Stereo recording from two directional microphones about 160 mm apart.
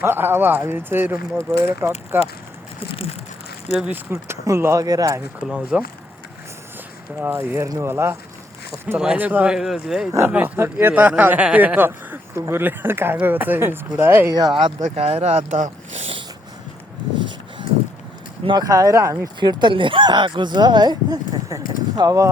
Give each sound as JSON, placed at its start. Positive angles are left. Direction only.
{"t": 0.0, "sound": "speech", "side_deg": -15}
{"t": 3.8, "sound": "speech", "side_deg": -10}
{"t": 5.5, "sound": "speech", "side_deg": -5}
{"t": 7.2, "sound": "speech", "side_deg": -15}
{"t": 10.1, "sound": "speech", "side_deg": -15}
{"t": 14.8, "sound": "speech", "side_deg": -45}
{"t": 17.2, "sound": "a sound", "side_deg": -30}
{"t": 18.4, "sound": "speech", "side_deg": -25}